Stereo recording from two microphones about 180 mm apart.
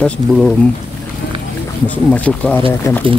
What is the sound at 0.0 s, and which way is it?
Speech, centre (ahead or behind).